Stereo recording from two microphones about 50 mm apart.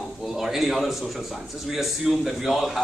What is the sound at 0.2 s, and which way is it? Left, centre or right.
A man's voice, centre.